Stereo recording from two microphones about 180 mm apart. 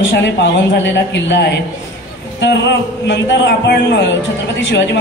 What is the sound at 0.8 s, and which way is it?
Speech, 80° left.